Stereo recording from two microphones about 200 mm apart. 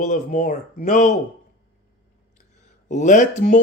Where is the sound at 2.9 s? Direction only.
35° left (ahead or behind).